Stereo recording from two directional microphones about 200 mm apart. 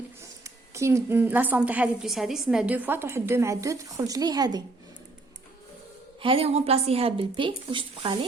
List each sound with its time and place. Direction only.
0.4 s a woman's voice: 15° right (ahead or behind)
6.2 s speech: 30° right (ahead or behind)